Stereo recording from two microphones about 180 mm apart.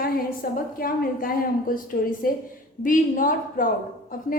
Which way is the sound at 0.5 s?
55° left (ahead or behind).